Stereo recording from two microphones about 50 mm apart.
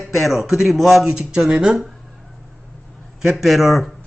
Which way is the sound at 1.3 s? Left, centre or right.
Centre.